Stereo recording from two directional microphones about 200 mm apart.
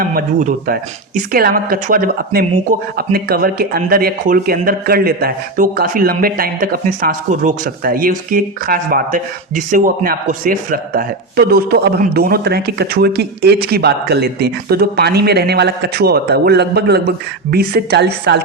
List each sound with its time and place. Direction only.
0.0 s speech: 45° right (ahead or behind)